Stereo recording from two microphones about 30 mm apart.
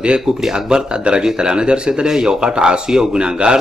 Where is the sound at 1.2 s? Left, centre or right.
Right.